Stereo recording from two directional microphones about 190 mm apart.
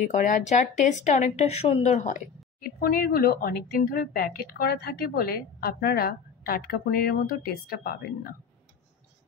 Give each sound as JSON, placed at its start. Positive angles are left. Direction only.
{"t": 0.1, "sound": "a woman's voice", "side_deg": 40}
{"t": 2.8, "sound": "a woman's voice", "side_deg": 55}